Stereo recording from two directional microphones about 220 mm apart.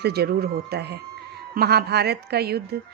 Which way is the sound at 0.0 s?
45° right (ahead or behind).